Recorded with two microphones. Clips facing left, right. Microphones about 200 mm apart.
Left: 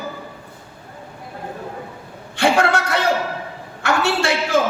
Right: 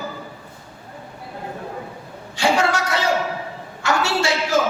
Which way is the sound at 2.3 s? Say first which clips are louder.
Left 2 dB; 55° left (ahead or behind).